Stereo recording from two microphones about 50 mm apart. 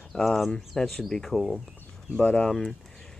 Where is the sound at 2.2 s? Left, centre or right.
Left.